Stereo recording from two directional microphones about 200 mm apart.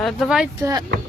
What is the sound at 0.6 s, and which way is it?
Speech, 20° right (ahead or behind).